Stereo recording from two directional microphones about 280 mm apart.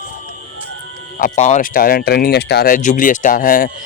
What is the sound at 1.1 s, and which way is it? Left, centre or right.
Speech, left.